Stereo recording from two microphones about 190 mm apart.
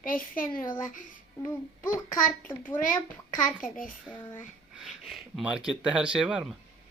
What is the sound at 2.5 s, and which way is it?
Speech, 10° left (ahead or behind).